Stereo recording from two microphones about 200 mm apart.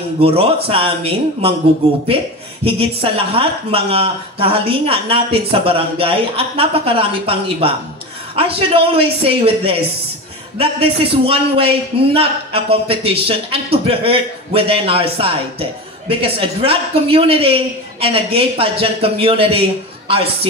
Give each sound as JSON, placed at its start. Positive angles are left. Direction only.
{"t": 0.2, "sound": "a man's voice", "side_deg": -30}
{"t": 2.6, "sound": "a man's voice", "side_deg": -30}